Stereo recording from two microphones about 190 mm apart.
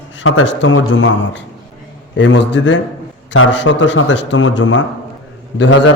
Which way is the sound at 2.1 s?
70° left (ahead or behind).